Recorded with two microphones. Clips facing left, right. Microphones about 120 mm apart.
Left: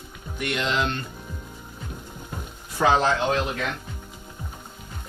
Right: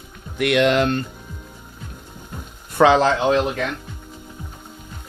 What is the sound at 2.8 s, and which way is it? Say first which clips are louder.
Speech: right 6 dB; 75° right (ahead or behind).